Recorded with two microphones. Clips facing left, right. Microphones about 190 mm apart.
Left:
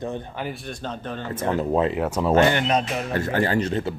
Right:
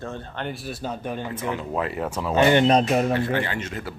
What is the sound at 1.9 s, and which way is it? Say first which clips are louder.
Speech: left 4 dB; 10° left (ahead or behind).